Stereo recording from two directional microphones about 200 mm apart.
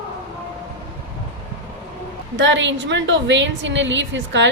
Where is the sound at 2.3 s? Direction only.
65° right (ahead or behind).